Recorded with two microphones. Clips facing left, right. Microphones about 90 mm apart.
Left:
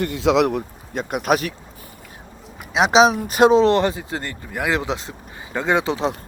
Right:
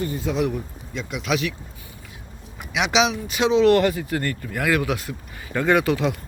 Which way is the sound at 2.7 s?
35° left (ahead or behind).